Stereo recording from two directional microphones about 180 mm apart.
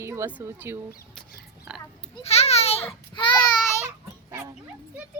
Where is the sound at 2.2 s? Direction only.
35° left (ahead or behind).